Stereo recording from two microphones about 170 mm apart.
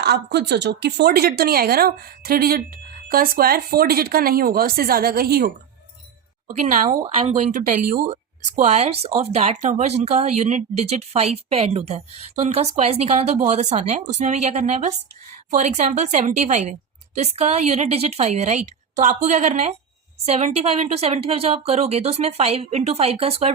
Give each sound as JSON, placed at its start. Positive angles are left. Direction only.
{"t": 0.0, "sound": "speech", "side_deg": -75}
{"t": 6.9, "sound": "speech", "side_deg": -25}
{"t": 7.3, "sound": "a woman's voice", "side_deg": -45}
{"t": 8.5, "sound": "a woman's voice", "side_deg": -40}